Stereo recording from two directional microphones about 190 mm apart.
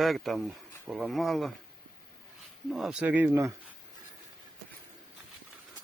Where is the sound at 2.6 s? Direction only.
Centre (ahead or behind).